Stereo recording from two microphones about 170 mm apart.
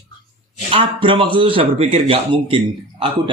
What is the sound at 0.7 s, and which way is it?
Speech, 30° right (ahead or behind).